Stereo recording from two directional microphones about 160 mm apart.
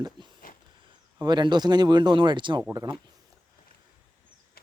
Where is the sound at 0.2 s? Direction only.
30° right (ahead or behind).